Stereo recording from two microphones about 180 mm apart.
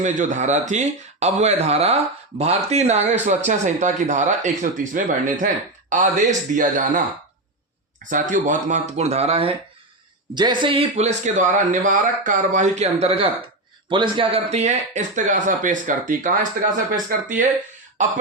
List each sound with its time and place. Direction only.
0.0 s speech: 40° right (ahead or behind)
8.1 s speech: 45° right (ahead or behind)